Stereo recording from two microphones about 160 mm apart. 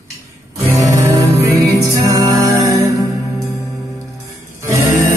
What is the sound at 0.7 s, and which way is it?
Music, 20° right (ahead or behind).